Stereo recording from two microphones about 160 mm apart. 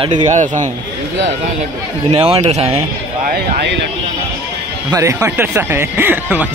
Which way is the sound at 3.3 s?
90° right.